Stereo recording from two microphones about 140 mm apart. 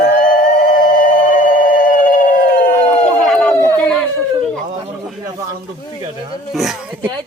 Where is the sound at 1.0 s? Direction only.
75° left (ahead or behind).